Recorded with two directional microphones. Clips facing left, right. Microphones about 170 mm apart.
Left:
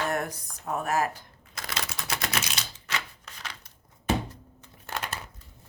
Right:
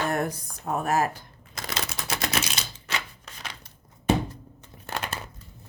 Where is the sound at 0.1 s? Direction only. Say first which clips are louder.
Right 3 dB; 30° right (ahead or behind).